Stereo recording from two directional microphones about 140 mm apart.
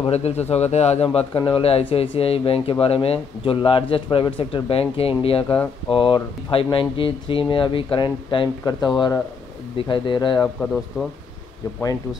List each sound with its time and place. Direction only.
0.0 s speech: 50° left (ahead or behind)
1.1 s speech: 40° left (ahead or behind)
10.6 s speech: 5° left (ahead or behind)